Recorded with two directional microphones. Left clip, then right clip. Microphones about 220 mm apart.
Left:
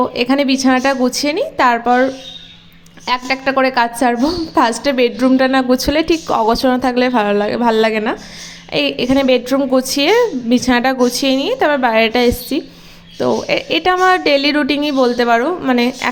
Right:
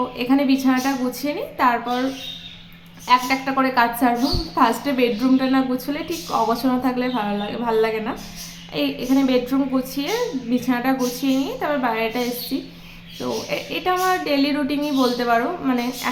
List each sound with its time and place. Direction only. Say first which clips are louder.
0.2 s a woman's voice: left 5 dB; 40° left (ahead or behind)
3.1 s a woman's voice: left 2 dB; 35° left (ahead or behind)